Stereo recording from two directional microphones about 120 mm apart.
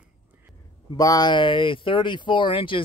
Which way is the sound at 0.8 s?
30° left (ahead or behind).